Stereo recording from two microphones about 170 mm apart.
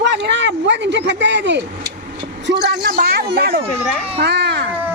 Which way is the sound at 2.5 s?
75° right (ahead or behind).